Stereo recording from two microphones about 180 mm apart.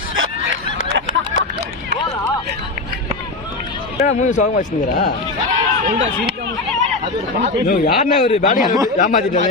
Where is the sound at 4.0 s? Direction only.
40° left (ahead or behind).